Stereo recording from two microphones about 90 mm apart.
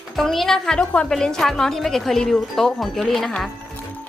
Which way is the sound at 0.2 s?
5° left (ahead or behind).